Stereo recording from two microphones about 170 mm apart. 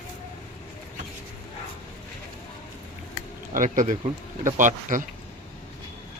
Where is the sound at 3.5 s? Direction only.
50° right (ahead or behind).